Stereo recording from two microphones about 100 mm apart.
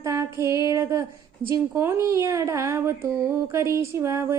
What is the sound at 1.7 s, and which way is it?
Speech, 25° right (ahead or behind).